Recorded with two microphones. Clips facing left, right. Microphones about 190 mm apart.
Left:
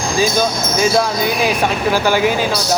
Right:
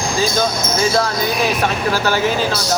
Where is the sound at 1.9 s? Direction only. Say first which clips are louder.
Left 5 dB; 15° left (ahead or behind).